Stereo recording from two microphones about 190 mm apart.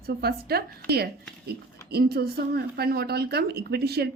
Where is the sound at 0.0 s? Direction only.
55° right (ahead or behind).